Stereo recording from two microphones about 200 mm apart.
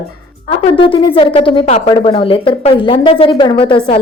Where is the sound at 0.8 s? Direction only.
25° left (ahead or behind).